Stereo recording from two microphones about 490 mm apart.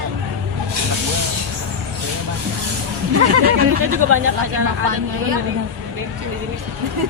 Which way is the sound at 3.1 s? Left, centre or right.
Right.